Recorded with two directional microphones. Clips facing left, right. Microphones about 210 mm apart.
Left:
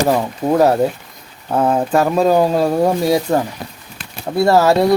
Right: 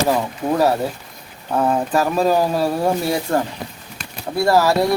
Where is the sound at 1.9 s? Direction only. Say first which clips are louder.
Left 3 dB; 25° left (ahead or behind).